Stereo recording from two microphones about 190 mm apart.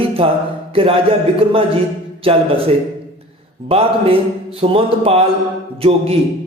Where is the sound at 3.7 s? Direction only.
30° right (ahead or behind).